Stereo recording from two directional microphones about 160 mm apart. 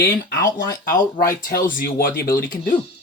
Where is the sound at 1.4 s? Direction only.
60° left (ahead or behind).